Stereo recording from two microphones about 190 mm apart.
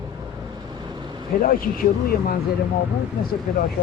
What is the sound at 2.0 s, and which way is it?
Speech, 50° left (ahead or behind).